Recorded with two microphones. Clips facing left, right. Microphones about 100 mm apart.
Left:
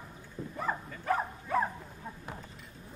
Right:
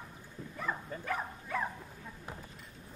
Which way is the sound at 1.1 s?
35° left (ahead or behind).